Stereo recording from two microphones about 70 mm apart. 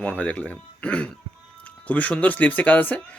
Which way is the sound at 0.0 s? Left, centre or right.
Left.